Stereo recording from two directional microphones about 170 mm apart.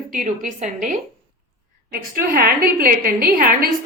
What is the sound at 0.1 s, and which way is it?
A woman's voice, 50° right (ahead or behind).